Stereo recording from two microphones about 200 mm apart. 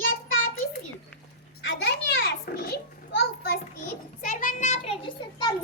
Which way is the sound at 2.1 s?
55° left (ahead or behind).